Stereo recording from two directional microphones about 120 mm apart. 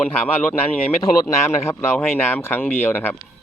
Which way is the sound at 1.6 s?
20° left (ahead or behind).